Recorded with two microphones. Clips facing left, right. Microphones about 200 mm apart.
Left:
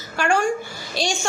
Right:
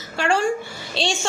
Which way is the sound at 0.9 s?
30° right (ahead or behind).